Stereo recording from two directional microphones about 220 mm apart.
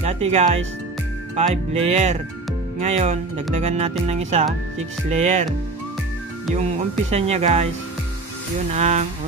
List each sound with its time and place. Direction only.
0.0 s speech: 30° right (ahead or behind)
6.5 s speech: 30° right (ahead or behind)
8.7 s speech: 30° right (ahead or behind)